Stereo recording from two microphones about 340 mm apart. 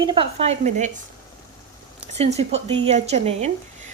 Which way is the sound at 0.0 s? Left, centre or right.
Centre.